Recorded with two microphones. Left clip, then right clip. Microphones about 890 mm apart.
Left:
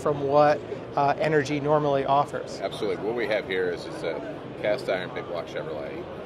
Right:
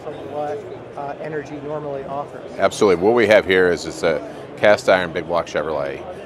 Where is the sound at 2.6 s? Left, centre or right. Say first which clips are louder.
Right 15 dB; right.